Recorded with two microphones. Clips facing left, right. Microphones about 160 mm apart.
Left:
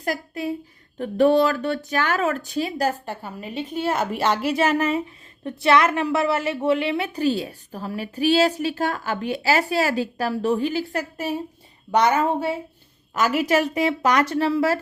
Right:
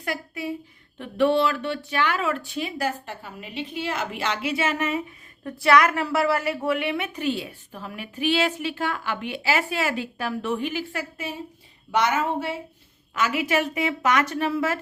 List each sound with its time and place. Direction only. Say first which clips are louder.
0.0 s speech: left 4 dB; 40° left (ahead or behind)